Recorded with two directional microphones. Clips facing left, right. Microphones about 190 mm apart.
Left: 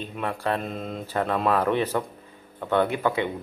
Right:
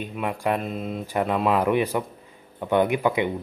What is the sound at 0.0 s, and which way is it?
Speech, 10° right (ahead or behind).